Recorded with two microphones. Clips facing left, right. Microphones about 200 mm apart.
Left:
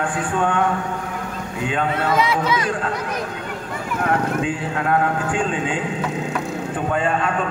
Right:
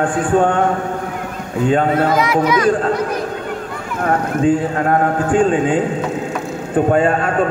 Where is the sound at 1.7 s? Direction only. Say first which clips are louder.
Right 8 dB; 40° right (ahead or behind).